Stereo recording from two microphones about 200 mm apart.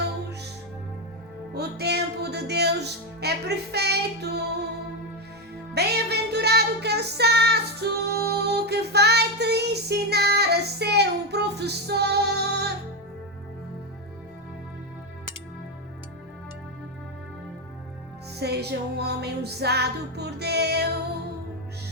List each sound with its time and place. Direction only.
1.5 s music: 55° right (ahead or behind)
5.7 s music: 55° right (ahead or behind)
18.3 s music: 55° right (ahead or behind)